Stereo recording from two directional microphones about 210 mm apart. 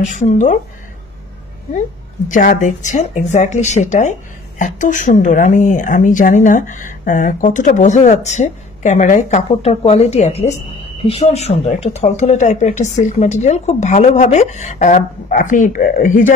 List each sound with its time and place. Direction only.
0.0 s speech: 35° left (ahead or behind)
2.2 s speech: 40° left (ahead or behind)